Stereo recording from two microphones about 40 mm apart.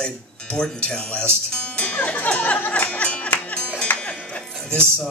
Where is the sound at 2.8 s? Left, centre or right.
Left.